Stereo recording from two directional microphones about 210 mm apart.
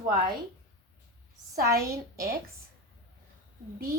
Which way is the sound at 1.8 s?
45° right (ahead or behind).